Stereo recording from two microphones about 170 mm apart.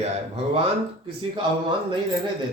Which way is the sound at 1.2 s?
30° right (ahead or behind).